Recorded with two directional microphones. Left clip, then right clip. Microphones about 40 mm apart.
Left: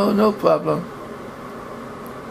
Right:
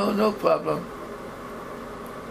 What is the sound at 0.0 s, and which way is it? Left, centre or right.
Speech, left.